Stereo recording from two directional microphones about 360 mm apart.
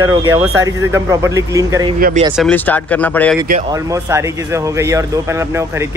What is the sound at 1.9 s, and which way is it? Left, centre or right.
Speech, right.